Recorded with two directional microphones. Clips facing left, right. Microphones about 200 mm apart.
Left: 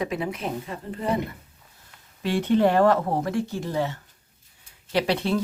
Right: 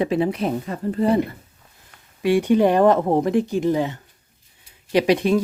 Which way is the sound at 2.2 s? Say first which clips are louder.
Right 4 dB; 15° right (ahead or behind).